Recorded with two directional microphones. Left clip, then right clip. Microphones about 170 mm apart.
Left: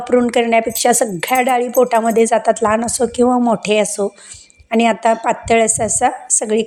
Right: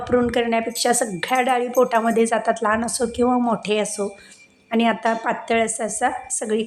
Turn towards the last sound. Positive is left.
turn(degrees=30)  # may be behind; listen again after turning